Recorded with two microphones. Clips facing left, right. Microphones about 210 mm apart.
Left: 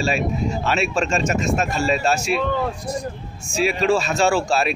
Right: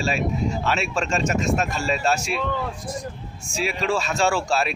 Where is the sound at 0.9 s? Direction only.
5° left (ahead or behind).